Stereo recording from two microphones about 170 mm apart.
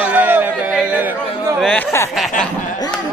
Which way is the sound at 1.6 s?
10° left (ahead or behind).